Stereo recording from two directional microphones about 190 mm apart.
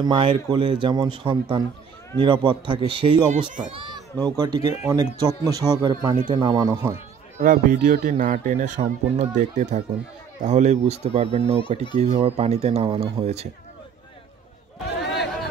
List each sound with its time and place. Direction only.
0.0 s speech: 25° right (ahead or behind)
7.4 s speech: 45° right (ahead or behind)
14.9 s a sound: 65° left (ahead or behind)